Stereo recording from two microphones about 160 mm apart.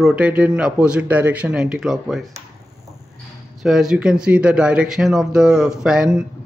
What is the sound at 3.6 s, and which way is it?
Speech, centre (ahead or behind).